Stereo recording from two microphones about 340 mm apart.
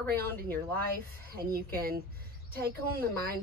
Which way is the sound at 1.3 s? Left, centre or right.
Right.